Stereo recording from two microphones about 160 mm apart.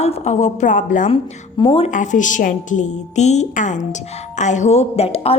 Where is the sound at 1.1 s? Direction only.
30° left (ahead or behind).